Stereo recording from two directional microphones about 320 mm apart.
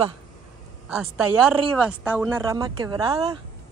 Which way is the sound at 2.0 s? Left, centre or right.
Centre.